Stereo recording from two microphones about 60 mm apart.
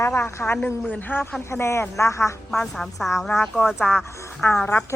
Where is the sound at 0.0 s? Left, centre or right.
Left.